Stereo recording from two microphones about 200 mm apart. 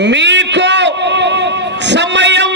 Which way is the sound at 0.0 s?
60° right (ahead or behind).